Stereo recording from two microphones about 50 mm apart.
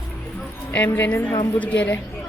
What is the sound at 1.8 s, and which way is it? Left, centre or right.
Speech, left.